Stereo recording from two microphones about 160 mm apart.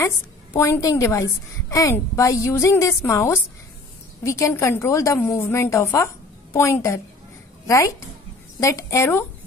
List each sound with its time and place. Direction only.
0.0 s a woman's voice: 20° left (ahead or behind)